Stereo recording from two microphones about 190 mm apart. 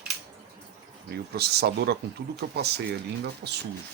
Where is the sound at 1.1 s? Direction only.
55° right (ahead or behind).